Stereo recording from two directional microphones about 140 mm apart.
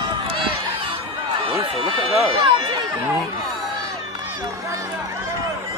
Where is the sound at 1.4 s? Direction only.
40° right (ahead or behind).